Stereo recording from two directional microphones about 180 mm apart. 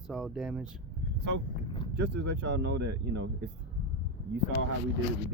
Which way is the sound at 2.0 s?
75° right (ahead or behind).